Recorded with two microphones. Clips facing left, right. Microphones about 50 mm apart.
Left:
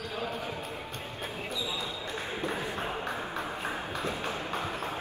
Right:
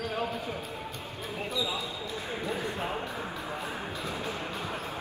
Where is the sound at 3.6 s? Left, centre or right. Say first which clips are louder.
Left 2 dB; left.